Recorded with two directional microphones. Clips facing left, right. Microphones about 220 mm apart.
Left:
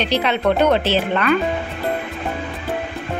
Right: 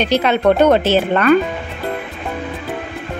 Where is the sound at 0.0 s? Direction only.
45° right (ahead or behind).